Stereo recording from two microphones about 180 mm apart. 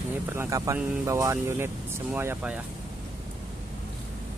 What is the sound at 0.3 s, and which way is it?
Speech, 15° right (ahead or behind).